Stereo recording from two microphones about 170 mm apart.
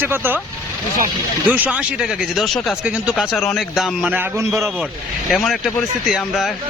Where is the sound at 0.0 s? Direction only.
10° right (ahead or behind).